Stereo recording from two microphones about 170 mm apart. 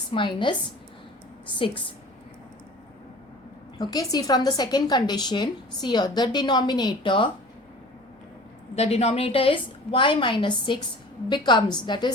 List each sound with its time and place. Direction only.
0.1 s a woman's voice: 30° left (ahead or behind)
1.5 s a woman's voice: 30° left (ahead or behind)
3.8 s a woman's voice: 20° left (ahead or behind)
8.7 s a woman's voice: 40° left (ahead or behind)